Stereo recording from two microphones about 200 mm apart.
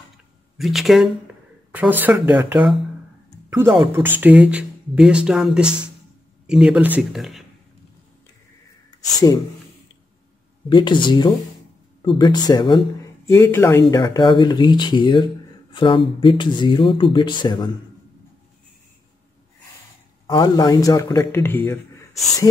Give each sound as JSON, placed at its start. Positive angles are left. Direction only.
{"t": 0.6, "sound": "speech", "side_deg": 0}
{"t": 3.4, "sound": "a sound", "side_deg": -10}
{"t": 3.8, "sound": "speech", "side_deg": -10}
{"t": 10.7, "sound": "speech", "side_deg": 25}
{"t": 20.2, "sound": "speech", "side_deg": 20}